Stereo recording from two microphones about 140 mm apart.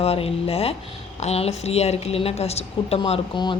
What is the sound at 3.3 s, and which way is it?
Speech, 35° left (ahead or behind).